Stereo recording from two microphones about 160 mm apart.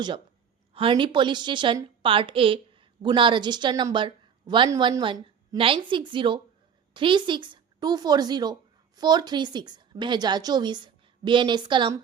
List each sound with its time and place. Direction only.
0.7 s a woman's voice: 35° right (ahead or behind)